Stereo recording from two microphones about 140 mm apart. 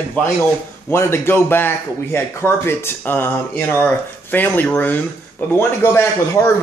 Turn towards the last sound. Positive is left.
turn(degrees=20)  # may be behind; listen again after turning